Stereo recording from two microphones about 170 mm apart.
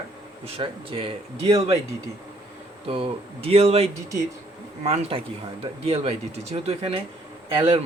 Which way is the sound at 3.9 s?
15° right (ahead or behind).